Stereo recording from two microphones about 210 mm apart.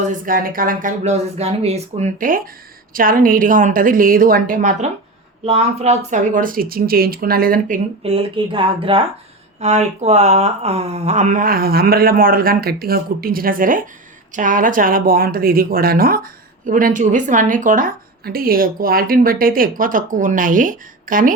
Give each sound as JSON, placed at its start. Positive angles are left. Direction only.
{"t": 0.3, "sound": "speech", "side_deg": -40}
{"t": 8.0, "sound": "speech", "side_deg": -25}